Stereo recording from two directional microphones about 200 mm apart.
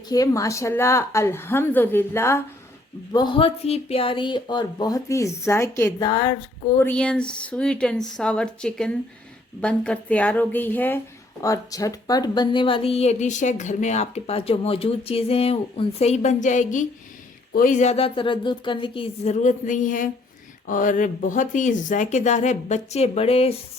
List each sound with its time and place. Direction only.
0.1 s a woman's voice: 15° left (ahead or behind)
6.7 s a woman's voice: 10° left (ahead or behind); by 23.6 s 30° left (ahead or behind)